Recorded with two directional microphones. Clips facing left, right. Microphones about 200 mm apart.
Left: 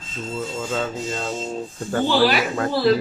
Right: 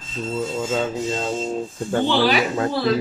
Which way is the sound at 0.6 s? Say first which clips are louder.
Right 2 dB; 20° right (ahead or behind).